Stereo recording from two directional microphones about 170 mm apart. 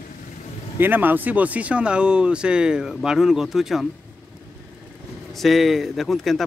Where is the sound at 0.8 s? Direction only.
10° right (ahead or behind).